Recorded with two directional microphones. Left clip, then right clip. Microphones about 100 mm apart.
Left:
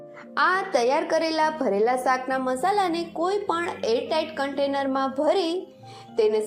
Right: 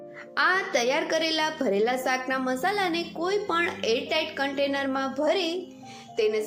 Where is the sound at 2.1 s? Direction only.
15° left (ahead or behind).